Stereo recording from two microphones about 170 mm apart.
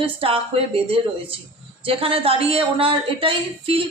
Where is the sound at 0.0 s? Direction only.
30° right (ahead or behind).